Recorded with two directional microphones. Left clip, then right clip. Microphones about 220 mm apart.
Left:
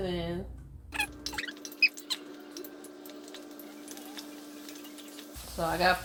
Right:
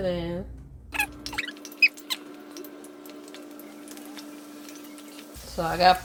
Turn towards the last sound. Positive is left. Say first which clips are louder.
# right 7 dB
turn(degrees=-50)  # may be behind; listen again after turning